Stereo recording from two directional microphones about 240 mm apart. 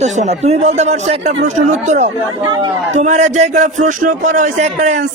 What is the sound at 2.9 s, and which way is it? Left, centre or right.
Speech, right.